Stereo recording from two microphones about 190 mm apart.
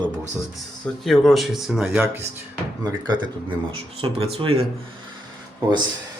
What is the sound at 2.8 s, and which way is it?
Speech, 25° right (ahead or behind).